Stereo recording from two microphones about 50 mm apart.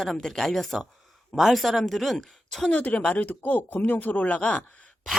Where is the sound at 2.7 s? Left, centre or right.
Left.